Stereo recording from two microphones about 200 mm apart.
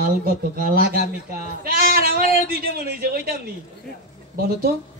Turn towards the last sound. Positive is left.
turn(degrees=-50)  # may be behind; listen again after turning